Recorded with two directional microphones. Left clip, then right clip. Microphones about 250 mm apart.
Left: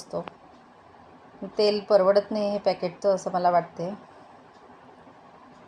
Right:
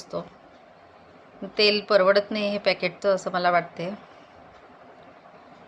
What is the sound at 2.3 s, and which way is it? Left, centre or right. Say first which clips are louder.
Speech: even; centre.